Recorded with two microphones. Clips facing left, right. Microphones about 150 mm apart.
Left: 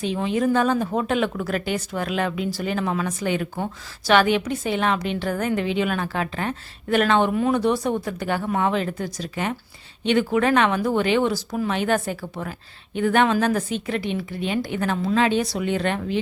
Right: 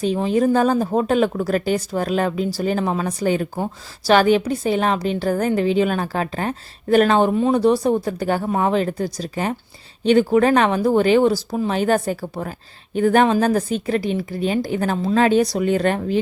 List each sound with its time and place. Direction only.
0.0 s a woman's voice: 40° right (ahead or behind)